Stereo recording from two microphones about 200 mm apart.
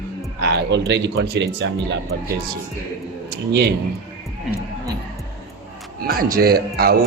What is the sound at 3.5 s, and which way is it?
Speech, 55° right (ahead or behind).